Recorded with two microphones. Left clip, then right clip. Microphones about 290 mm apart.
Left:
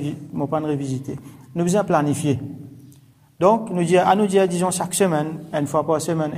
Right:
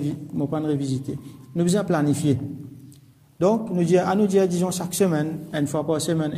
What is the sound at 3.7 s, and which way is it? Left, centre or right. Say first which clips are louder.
Speech: left 4 dB; centre.